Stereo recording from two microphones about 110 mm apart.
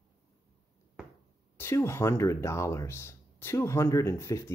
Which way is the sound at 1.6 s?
25° left (ahead or behind).